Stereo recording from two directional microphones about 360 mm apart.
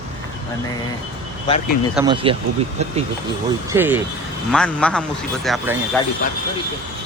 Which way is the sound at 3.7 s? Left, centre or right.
Centre.